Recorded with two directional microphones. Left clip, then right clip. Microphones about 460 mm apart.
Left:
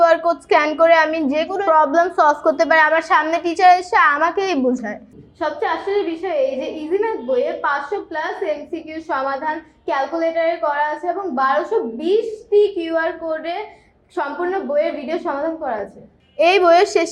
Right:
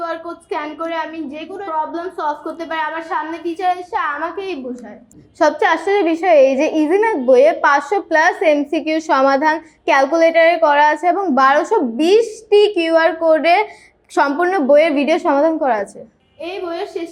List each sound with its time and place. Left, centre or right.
0.0 s a woman's voice: left
5.4 s a woman's voice: right
14.7 s a woman's voice: right
16.4 s a woman's voice: left